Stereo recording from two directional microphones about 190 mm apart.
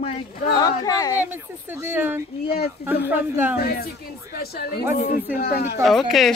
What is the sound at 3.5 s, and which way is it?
Speech, 55° left (ahead or behind).